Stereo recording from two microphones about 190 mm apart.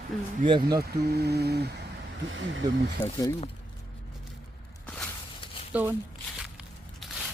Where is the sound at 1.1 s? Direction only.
60° right (ahead or behind).